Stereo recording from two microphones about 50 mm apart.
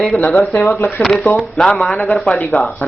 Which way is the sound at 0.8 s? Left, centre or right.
Centre.